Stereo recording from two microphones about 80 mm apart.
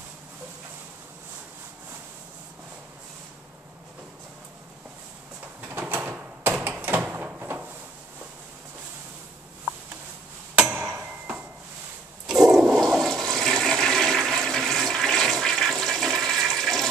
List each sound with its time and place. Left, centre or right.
5.7 s a sound: right
10.6 s tick-tock: centre
12.3 s toilet flush: centre